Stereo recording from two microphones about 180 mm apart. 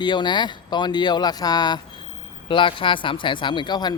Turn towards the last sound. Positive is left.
turn(degrees=25)  # may be behind; listen again after turning